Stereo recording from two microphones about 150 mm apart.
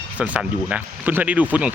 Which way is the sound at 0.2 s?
10° right (ahead or behind).